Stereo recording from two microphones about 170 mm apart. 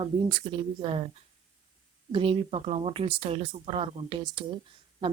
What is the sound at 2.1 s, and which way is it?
A woman's voice, 30° right (ahead or behind).